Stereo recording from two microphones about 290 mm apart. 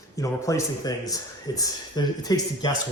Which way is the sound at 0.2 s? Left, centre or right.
Centre.